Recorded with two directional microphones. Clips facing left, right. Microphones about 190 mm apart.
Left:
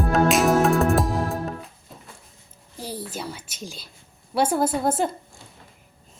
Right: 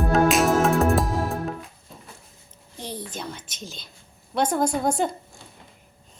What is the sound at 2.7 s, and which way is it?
A child's voice, 5° left (ahead or behind).